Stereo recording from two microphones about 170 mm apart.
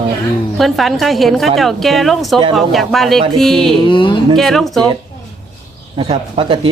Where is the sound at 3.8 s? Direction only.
30° left (ahead or behind).